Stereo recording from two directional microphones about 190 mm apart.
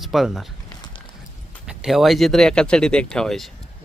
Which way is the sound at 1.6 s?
Centre (ahead or behind).